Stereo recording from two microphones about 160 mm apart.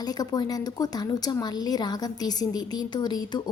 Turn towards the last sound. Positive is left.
turn(degrees=25)  # may be behind; listen again after turning